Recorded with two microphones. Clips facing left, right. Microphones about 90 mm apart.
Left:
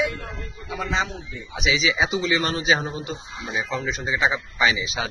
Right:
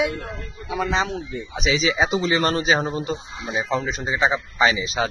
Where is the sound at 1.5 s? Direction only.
40° right (ahead or behind).